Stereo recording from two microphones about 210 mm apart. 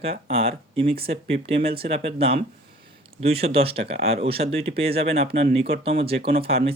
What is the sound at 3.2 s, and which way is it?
Speech, 30° right (ahead or behind).